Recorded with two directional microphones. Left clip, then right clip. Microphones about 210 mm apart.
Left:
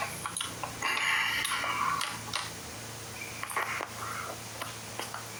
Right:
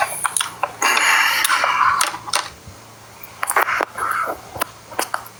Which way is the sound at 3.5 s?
45° right (ahead or behind).